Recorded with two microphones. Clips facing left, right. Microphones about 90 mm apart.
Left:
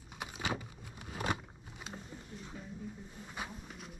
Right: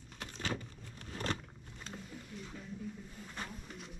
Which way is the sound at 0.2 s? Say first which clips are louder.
Left 2 dB; 10° left (ahead or behind).